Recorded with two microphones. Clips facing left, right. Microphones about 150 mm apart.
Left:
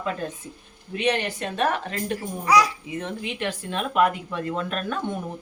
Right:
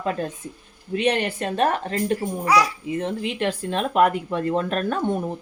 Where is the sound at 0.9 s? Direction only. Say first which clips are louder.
Right 3 dB; 35° right (ahead or behind).